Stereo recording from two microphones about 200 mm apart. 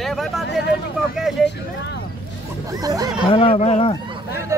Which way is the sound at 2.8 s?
20° right (ahead or behind).